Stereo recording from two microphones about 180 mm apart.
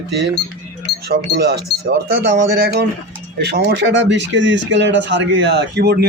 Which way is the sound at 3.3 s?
65° right (ahead or behind).